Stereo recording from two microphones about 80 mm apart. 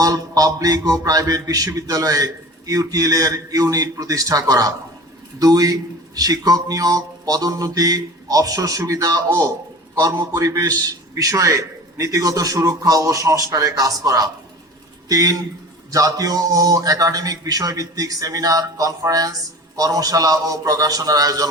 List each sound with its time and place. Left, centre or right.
0.0 s a man's voice: right
10.2 s a man's voice: right